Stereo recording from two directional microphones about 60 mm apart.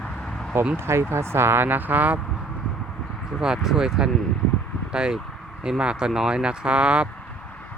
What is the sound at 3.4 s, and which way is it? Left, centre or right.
Speech, centre.